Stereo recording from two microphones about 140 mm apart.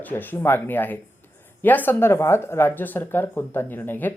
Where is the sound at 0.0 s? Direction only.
15° left (ahead or behind).